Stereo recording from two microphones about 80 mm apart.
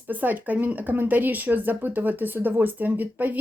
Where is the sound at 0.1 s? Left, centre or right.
Right.